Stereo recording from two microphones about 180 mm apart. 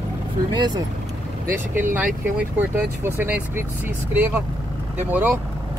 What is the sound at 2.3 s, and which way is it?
Speech, 10° right (ahead or behind).